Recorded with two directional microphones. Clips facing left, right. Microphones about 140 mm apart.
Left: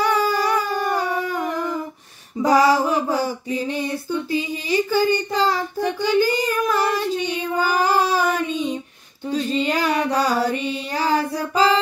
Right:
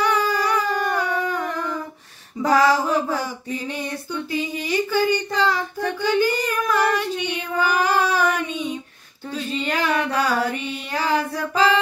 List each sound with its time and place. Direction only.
0.0 s howl: 30° left (ahead or behind)
2.4 s female singing: 15° left (ahead or behind)
4.9 s a child's voice: 35° left (ahead or behind)
5.9 s child singing: 35° left (ahead or behind)
9.3 s child singing: 35° left (ahead or behind)